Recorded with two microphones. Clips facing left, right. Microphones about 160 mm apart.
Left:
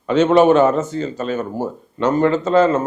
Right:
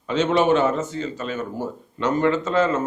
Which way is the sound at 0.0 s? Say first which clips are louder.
Left 7 dB; 55° left (ahead or behind).